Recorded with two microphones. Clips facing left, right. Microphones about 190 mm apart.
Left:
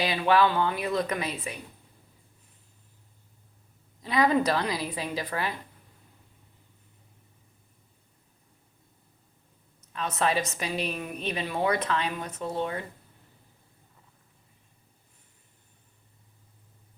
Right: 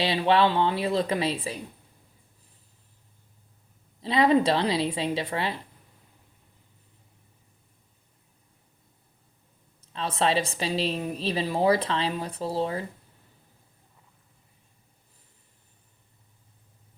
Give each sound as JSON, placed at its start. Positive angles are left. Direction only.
{"t": 0.0, "sound": "a woman's voice", "side_deg": -30}
{"t": 4.0, "sound": "a woman's voice", "side_deg": -30}
{"t": 9.8, "sound": "a woman's voice", "side_deg": -30}